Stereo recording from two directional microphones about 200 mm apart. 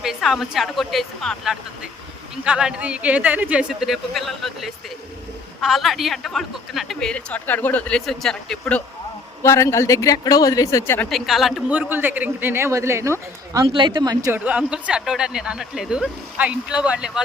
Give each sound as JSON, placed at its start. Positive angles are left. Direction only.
{"t": 0.0, "sound": "speech", "side_deg": 0}
{"t": 9.4, "sound": "speech", "side_deg": 15}
{"t": 11.1, "sound": "a man's voice", "side_deg": 0}